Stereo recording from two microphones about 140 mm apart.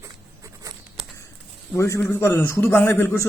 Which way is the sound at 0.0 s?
20° right (ahead or behind).